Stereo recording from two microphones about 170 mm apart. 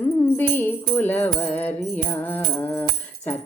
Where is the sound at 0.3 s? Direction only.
10° left (ahead or behind).